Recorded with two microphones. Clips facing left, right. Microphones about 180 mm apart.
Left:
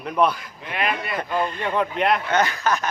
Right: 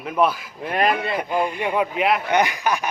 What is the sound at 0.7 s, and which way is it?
Speech, 40° right (ahead or behind).